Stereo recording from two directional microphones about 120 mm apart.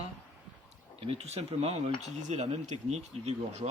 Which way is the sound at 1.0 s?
55° right (ahead or behind).